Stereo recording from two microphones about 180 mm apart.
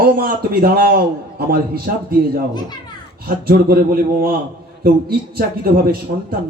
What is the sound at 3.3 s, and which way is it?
Speech, 55° right (ahead or behind).